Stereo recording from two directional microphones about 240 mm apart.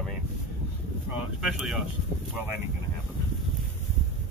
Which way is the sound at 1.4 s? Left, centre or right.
Centre.